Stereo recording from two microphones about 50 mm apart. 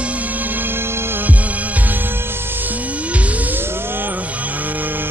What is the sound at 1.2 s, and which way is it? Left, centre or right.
Music, right.